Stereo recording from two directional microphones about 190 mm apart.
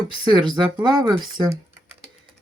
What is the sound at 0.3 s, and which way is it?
Speech, 25° right (ahead or behind).